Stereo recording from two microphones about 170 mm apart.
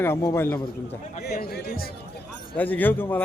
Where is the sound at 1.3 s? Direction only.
65° left (ahead or behind).